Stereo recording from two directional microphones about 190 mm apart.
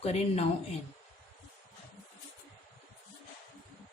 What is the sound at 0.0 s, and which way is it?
Speech, 35° left (ahead or behind).